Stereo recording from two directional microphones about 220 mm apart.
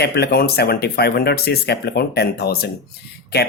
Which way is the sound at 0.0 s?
45° left (ahead or behind).